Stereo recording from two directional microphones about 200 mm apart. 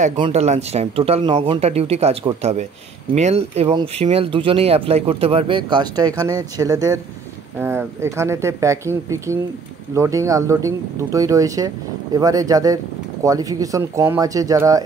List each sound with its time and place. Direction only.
0.2 s speech: 30° right (ahead or behind); by 14.8 s 15° right (ahead or behind)